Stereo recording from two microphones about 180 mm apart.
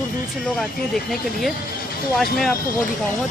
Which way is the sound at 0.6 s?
Centre (ahead or behind).